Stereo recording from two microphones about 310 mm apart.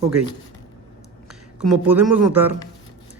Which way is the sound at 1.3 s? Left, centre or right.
Centre.